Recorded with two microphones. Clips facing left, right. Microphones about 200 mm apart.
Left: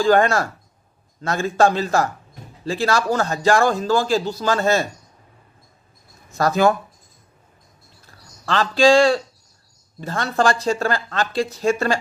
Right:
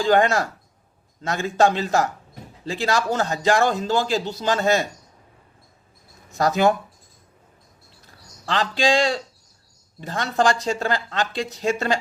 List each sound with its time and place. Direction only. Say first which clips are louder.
0.0 s a man's voice: left 2 dB; 20° right (ahead or behind)
6.3 s a man's voice: left 2 dB; 20° right (ahead or behind)
8.0 s a man's voice: left 3 dB; 15° right (ahead or behind)